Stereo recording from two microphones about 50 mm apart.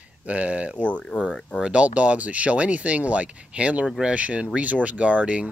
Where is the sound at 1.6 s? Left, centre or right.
Right.